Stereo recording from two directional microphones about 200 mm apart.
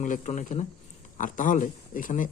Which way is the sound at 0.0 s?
40° left (ahead or behind).